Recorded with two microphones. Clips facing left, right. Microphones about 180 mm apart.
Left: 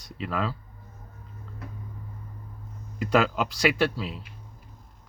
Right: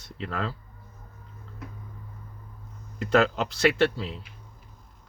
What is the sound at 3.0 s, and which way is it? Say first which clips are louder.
Speech: right 1 dB; 10° left (ahead or behind).